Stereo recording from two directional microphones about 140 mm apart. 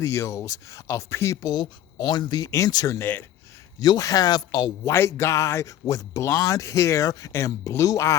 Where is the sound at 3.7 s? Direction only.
25° left (ahead or behind).